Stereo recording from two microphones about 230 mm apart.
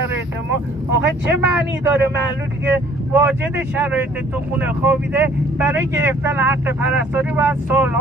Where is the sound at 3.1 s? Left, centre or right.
Centre.